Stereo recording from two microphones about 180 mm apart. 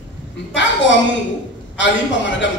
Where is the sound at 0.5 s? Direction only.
90° left.